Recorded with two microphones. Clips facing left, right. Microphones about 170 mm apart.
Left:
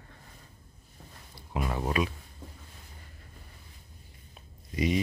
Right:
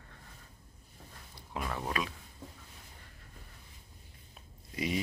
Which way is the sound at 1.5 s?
20° left (ahead or behind).